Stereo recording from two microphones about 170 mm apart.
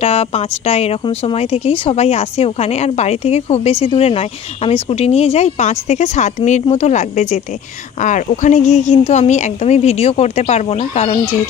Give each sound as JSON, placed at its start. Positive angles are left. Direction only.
{"t": 0.0, "sound": "a woman's voice", "side_deg": 35}